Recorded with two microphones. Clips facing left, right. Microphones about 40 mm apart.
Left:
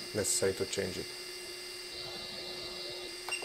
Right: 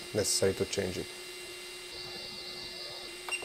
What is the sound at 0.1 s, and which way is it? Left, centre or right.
Speech, right.